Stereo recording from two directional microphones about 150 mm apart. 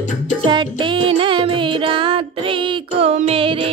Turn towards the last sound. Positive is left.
turn(degrees=-40)  # may be behind; listen again after turning